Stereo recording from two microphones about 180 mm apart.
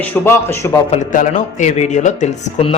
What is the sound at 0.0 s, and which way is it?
Speech, 10° left (ahead or behind).